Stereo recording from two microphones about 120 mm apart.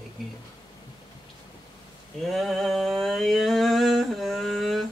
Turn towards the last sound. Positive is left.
turn(degrees=0)  # may be behind; listen again after turning